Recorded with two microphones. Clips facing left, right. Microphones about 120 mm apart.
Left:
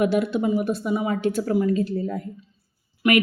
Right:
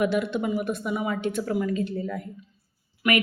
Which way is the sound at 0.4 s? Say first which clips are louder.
Left 4 dB; 30° left (ahead or behind).